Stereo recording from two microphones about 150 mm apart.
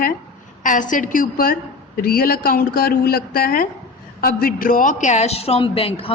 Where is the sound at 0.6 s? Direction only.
60° left (ahead or behind).